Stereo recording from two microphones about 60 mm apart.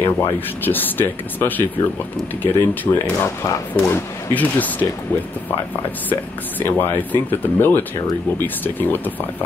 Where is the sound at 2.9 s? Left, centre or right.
Left.